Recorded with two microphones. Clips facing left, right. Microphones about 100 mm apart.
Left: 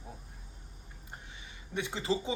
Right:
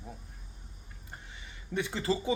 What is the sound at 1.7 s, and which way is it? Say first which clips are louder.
Speech: right 2 dB; 20° left (ahead or behind).